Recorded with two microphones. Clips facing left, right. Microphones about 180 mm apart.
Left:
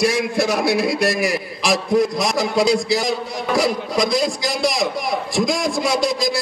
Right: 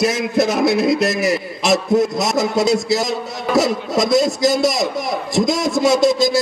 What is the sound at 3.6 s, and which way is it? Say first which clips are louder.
A man's voice: right 3 dB; 25° right (ahead or behind).